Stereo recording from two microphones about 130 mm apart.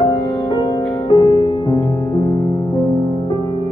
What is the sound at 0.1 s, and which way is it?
Music, 35° left (ahead or behind).